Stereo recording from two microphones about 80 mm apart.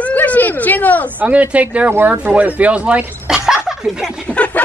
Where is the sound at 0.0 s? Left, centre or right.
Centre.